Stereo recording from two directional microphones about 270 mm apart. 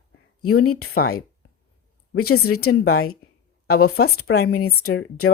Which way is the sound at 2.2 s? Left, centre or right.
Left.